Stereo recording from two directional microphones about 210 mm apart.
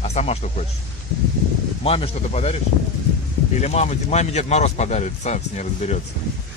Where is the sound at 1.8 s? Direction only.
30° left (ahead or behind).